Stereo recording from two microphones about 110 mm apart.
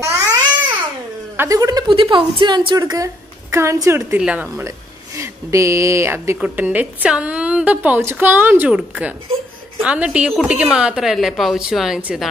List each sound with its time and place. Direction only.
0.0 s babbling: 30° right (ahead or behind)
1.5 s a woman's voice: 35° right (ahead or behind)
1.9 s a woman's voice: 50° right (ahead or behind); by 4.2 s 25° right (ahead or behind)
4.2 s a woman's voice: 15° right (ahead or behind)
4.6 s a woman's voice: 25° right (ahead or behind); by 12.2 s 10° right (ahead or behind)